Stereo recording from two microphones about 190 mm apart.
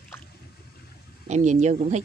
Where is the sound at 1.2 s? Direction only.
40° right (ahead or behind).